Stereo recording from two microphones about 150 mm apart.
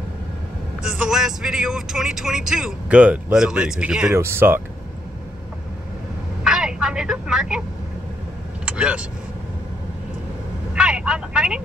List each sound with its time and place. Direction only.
0.8 s speech: 5° right (ahead or behind)
6.4 s vehicle: 5° right (ahead or behind)
8.6 s vehicle: 5° right (ahead or behind)
10.7 s vehicle: 5° right (ahead or behind)